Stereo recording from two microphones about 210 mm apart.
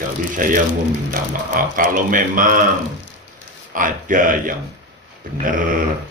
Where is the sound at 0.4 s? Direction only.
40° right (ahead or behind).